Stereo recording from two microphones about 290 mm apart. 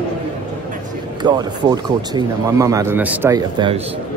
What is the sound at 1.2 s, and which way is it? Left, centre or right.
Speech, centre.